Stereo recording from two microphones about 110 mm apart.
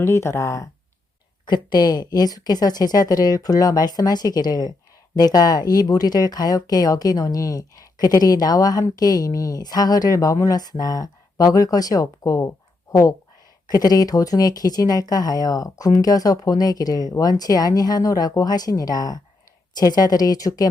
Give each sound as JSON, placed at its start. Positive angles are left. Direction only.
{"t": 0.0, "sound": "speech", "side_deg": 25}
{"t": 1.5, "sound": "speech", "side_deg": 40}